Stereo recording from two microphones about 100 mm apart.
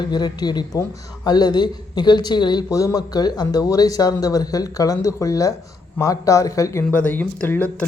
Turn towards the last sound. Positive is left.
turn(degrees=15)  # may be behind; listen again after turning